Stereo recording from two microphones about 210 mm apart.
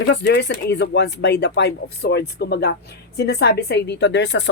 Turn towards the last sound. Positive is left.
turn(degrees=60)  # may be behind; listen again after turning